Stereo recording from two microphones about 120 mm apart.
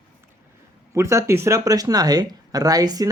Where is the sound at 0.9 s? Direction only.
25° right (ahead or behind).